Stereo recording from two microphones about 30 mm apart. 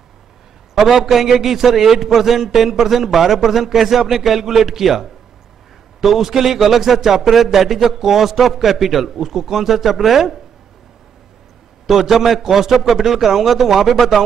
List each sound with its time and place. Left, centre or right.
0.7 s a man's voice: centre
11.9 s a man's voice: centre